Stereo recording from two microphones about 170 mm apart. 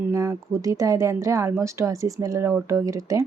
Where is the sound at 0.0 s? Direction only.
20° right (ahead or behind).